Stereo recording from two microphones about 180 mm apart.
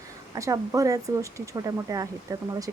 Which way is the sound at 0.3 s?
15° right (ahead or behind).